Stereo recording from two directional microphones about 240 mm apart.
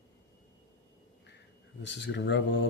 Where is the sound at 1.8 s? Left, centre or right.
Left.